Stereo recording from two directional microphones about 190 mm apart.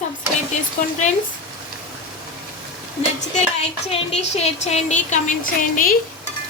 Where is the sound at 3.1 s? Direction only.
35° left (ahead or behind).